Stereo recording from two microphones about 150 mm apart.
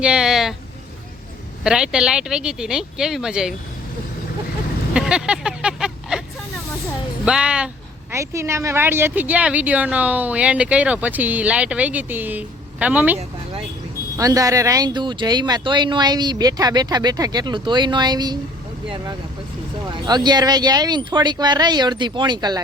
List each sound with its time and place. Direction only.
0.0 s speech: 5° right (ahead or behind)
1.6 s speech: 5° right (ahead or behind)
4.9 s vehicle: 5° right (ahead or behind)
7.3 s speech: 5° right (ahead or behind)
8.1 s speech: 20° right (ahead or behind)
14.2 s speech: 20° right (ahead or behind)
19.9 s speech: 30° right (ahead or behind)